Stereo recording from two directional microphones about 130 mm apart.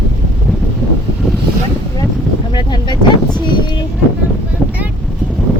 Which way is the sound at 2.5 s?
35° left (ahead or behind).